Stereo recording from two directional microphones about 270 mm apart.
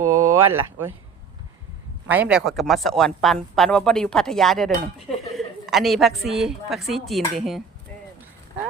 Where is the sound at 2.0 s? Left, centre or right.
Centre.